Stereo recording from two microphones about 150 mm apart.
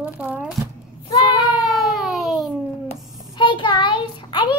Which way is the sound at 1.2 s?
25° left (ahead or behind).